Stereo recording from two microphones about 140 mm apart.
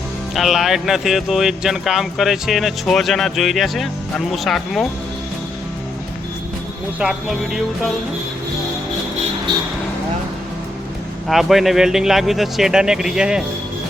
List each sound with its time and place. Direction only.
0.3 s speech: centre (ahead or behind)
7.0 s speech: 5° right (ahead or behind)
11.3 s speech: centre (ahead or behind)